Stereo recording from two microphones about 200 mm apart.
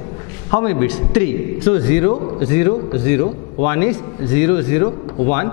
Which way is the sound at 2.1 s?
30° left (ahead or behind).